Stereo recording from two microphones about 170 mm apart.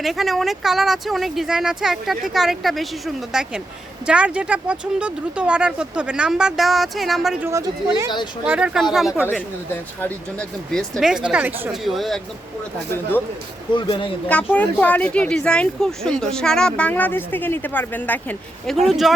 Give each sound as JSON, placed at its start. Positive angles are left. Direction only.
{"t": 0.0, "sound": "speech", "side_deg": 0}
{"t": 7.4, "sound": "speech", "side_deg": -20}
{"t": 8.4, "sound": "speech", "side_deg": -5}
{"t": 11.8, "sound": "speech", "side_deg": 0}
{"t": 13.7, "sound": "speech", "side_deg": 30}
{"t": 14.3, "sound": "speech", "side_deg": 10}